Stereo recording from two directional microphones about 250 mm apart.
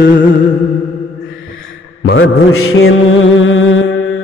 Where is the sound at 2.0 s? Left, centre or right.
Left.